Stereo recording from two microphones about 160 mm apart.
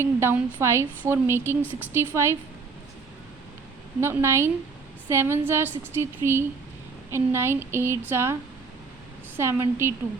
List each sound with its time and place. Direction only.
0.0 s a woman's voice: 15° right (ahead or behind)
4.0 s a woman's voice: 15° right (ahead or behind)